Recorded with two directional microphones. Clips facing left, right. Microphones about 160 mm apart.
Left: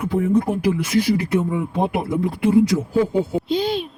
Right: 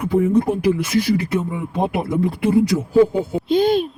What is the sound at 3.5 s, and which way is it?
Speech, 50° right (ahead or behind).